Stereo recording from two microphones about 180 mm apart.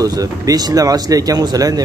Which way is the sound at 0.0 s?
20° right (ahead or behind).